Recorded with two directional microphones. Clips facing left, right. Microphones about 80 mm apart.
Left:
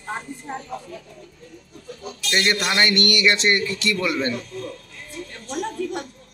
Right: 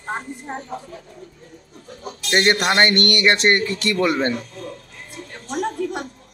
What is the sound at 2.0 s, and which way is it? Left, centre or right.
Speech, right.